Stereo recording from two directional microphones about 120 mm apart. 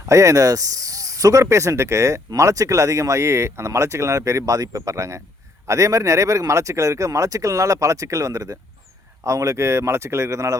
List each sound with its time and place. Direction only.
0.0 s speech: 25° right (ahead or behind)